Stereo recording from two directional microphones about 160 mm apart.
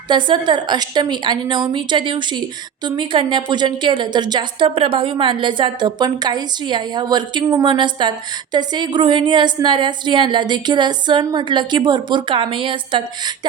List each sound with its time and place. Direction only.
0.1 s a woman's voice: 30° right (ahead or behind)